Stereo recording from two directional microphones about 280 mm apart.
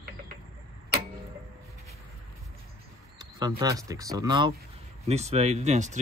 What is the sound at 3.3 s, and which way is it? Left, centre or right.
Speech, centre.